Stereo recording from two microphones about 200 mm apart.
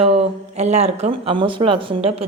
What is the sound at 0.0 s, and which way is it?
A woman's voice, 30° right (ahead or behind).